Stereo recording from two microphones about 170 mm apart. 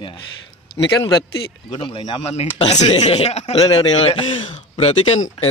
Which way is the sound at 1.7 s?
30° left (ahead or behind).